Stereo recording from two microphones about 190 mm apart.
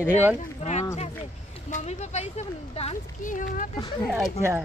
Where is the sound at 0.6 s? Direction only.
35° left (ahead or behind).